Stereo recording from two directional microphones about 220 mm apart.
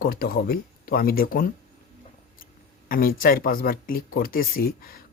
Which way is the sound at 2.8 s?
40° left (ahead or behind).